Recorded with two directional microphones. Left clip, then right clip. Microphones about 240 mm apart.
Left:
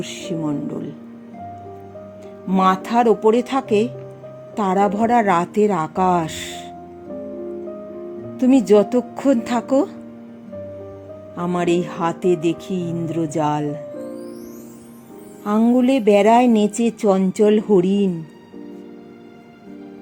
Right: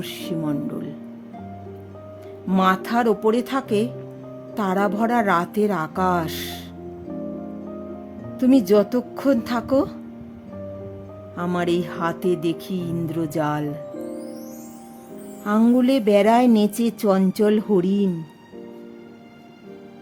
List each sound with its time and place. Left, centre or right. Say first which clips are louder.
0.0 s speech: left 2 dB; centre
2.5 s speech: left 3 dB; centre
8.4 s speech: left 3 dB; centre
11.3 s speech: left 3 dB; centre
15.5 s speech: left 2 dB; centre